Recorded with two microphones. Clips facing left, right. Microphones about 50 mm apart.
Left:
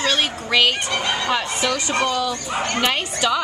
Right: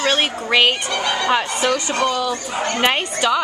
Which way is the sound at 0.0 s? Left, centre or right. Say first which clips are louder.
Right 2 dB; right.